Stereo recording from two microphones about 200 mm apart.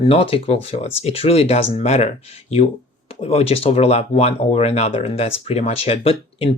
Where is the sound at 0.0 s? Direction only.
30° left (ahead or behind).